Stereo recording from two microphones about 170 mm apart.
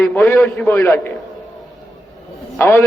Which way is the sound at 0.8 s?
20° left (ahead or behind).